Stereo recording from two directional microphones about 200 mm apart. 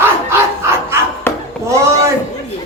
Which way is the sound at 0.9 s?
10° right (ahead or behind).